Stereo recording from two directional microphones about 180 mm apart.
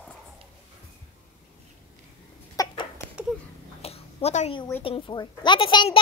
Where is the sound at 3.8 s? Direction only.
35° left (ahead or behind).